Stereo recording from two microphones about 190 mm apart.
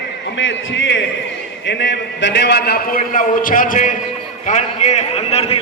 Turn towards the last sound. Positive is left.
turn(degrees=35)  # may be behind; listen again after turning